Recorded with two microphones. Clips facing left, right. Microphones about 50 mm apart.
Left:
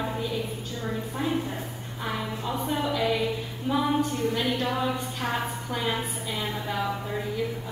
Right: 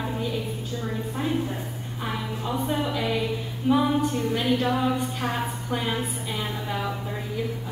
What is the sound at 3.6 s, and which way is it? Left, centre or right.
Music, centre.